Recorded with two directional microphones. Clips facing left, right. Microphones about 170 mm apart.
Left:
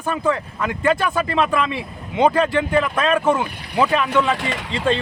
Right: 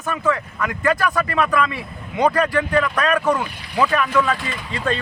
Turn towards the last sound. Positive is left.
turn(degrees=25)  # may be behind; listen again after turning